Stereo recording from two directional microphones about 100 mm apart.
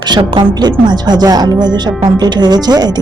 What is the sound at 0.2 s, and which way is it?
Speech, 45° right (ahead or behind).